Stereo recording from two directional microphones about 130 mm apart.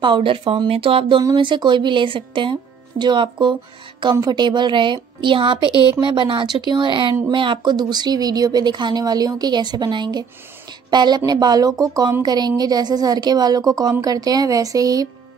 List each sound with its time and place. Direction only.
0.0 s a woman's voice: 40° right (ahead or behind)
5.7 s speech: 30° left (ahead or behind)
5.9 s a woman's voice: 40° right (ahead or behind)